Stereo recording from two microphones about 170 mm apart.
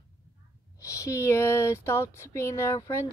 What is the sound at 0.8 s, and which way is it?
Speech, 20° left (ahead or behind).